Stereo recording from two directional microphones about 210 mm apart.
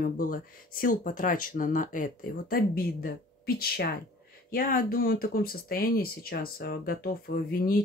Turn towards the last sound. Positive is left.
turn(degrees=45)  # may be behind; listen again after turning